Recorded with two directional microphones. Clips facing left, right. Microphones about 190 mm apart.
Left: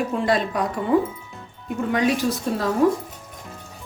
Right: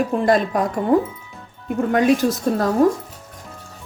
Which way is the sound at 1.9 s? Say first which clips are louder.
Right 4 dB; 50° right (ahead or behind).